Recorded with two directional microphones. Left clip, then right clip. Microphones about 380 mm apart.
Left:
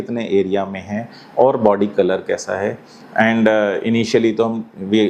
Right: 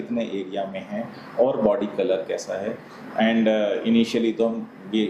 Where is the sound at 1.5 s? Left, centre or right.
Left.